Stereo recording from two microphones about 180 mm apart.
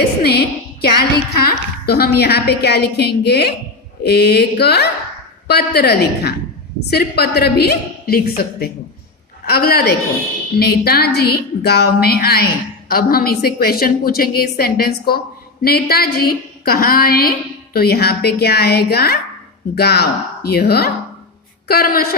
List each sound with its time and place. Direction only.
0.2 s a woman's voice: 60° left (ahead or behind)